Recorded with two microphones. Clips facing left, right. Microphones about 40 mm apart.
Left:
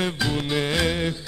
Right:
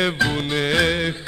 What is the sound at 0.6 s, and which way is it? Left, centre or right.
Music, right.